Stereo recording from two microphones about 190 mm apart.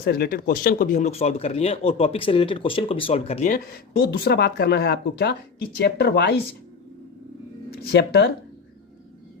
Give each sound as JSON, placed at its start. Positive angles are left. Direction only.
{"t": 0.0, "sound": "speech", "side_deg": 55}
{"t": 4.0, "sound": "speech", "side_deg": 55}
{"t": 7.7, "sound": "speech", "side_deg": 60}